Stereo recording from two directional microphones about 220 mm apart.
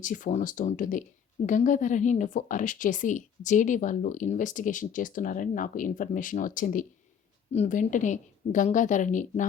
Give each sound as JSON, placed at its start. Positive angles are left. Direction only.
{"t": 0.0, "sound": "speech", "side_deg": 35}